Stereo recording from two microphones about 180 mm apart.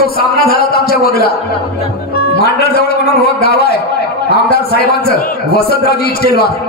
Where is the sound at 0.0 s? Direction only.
55° left (ahead or behind).